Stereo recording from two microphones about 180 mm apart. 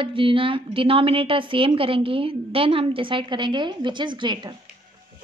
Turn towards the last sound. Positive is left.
turn(degrees=-25)  # may be behind; listen again after turning